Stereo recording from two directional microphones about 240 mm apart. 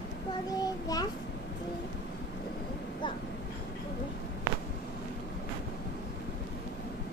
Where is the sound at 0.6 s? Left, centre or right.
Centre.